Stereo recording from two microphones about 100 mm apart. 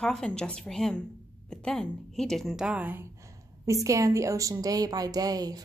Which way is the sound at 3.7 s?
30° right (ahead or behind).